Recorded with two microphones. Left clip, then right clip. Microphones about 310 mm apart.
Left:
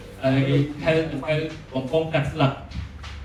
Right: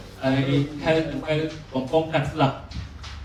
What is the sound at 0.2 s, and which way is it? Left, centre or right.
A man's voice, right.